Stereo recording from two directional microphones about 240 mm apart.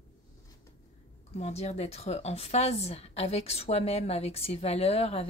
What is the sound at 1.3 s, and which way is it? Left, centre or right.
Speech, left.